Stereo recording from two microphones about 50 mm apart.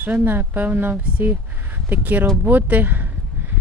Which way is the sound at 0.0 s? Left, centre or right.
Right.